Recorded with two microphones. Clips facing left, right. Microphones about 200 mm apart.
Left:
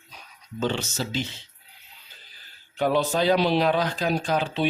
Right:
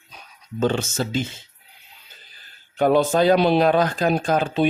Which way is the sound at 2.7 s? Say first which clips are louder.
Right 6 dB; 50° right (ahead or behind).